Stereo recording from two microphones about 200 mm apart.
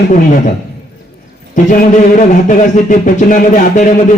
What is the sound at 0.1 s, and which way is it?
Speech, 40° left (ahead or behind).